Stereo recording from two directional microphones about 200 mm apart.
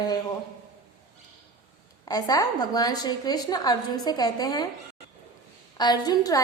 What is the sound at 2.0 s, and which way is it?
A woman's voice, 20° left (ahead or behind).